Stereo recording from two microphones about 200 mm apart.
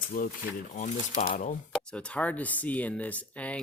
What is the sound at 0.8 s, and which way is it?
Speech, 35° left (ahead or behind).